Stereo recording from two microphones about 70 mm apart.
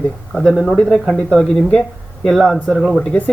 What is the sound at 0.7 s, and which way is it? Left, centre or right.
Speech, centre.